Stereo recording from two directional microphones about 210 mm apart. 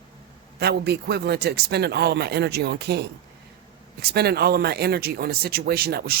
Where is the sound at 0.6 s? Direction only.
50° right (ahead or behind).